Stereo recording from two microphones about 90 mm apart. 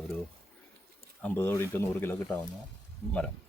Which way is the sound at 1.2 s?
25° left (ahead or behind).